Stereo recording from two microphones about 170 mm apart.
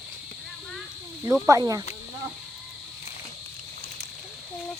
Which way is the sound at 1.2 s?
20° right (ahead or behind).